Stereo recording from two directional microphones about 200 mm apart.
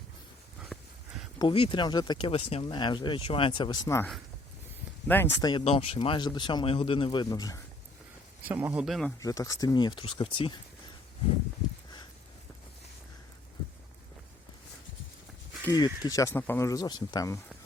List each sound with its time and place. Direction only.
0.7 s horse: centre (ahead or behind)
1.4 s speech: 25° left (ahead or behind)
8.4 s speech: 10° right (ahead or behind)
9.2 s speech: 15° left (ahead or behind)
15.6 s speech: 20° left (ahead or behind)